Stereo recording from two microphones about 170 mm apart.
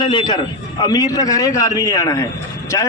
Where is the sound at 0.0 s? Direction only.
25° left (ahead or behind).